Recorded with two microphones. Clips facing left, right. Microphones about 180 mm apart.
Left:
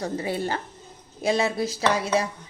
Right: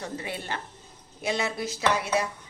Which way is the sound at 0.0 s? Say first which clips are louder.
Left 8 dB; 35° left (ahead or behind).